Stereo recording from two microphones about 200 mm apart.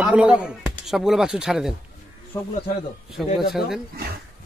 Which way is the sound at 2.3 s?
20° left (ahead or behind).